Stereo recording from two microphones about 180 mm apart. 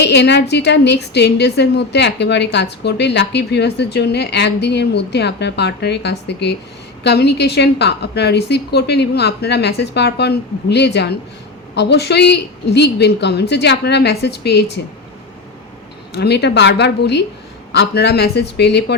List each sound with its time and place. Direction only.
0.0 s a woman's voice: 70° left (ahead or behind)
16.1 s a woman's voice: 65° left (ahead or behind)